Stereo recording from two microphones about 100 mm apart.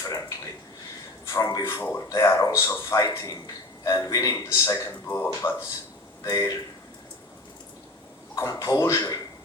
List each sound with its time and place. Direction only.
0.0 s a sound: 35° left (ahead or behind)
1.2 s a man's voice: 35° left (ahead or behind)
5.0 s speech: 25° left (ahead or behind)
6.2 s a man's voice: 35° left (ahead or behind)
8.4 s a man's voice: 35° left (ahead or behind)